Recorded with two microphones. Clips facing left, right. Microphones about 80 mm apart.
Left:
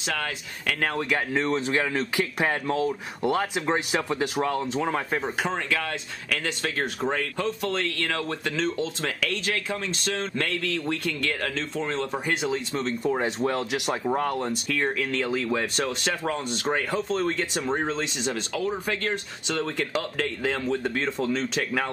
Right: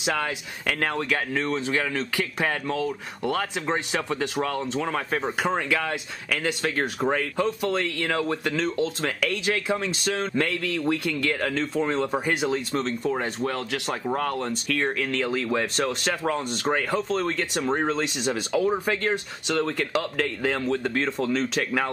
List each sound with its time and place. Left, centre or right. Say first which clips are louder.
0.0 s speech: right 3 dB; centre
3.2 s speech: left 2 dB; centre
13.5 s speech: left 2 dB; centre
18.9 s speech: right 3 dB; centre